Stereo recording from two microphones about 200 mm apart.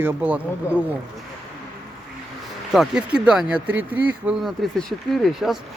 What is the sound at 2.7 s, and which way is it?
Speech, 5° right (ahead or behind).